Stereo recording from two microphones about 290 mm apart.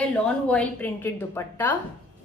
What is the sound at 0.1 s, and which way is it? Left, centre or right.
A woman's voice, centre.